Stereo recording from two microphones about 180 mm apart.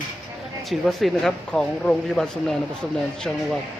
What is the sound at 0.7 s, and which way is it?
Speech, centre (ahead or behind).